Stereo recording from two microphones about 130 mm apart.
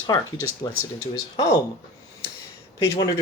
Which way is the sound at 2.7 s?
25° left (ahead or behind).